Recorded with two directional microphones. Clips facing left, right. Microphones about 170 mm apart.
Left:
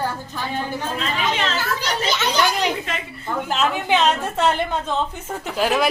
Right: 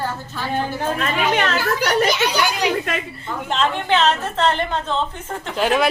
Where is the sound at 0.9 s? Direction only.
55° right (ahead or behind).